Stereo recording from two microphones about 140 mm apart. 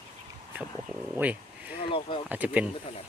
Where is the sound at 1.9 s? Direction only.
40° left (ahead or behind).